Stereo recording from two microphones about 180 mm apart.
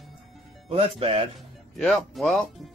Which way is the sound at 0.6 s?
35° right (ahead or behind).